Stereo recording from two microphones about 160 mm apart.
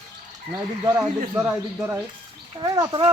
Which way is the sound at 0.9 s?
10° right (ahead or behind).